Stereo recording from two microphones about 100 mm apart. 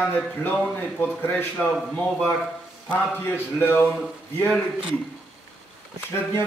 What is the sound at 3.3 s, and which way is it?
Speech, 20° left (ahead or behind).